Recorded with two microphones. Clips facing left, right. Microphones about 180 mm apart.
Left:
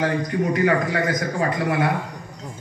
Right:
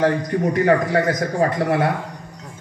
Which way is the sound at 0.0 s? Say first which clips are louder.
Right 3 dB; 40° right (ahead or behind).